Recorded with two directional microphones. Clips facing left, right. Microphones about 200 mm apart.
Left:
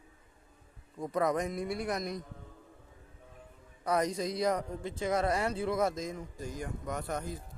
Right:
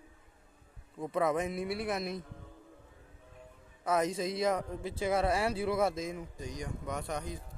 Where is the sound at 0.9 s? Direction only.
5° right (ahead or behind).